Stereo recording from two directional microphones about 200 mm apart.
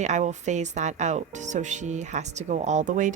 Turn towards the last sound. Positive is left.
turn(degrees=-40)  # may be behind; listen again after turning